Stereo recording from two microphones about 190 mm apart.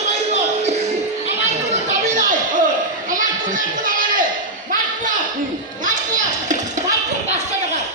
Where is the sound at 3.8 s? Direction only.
45° right (ahead or behind).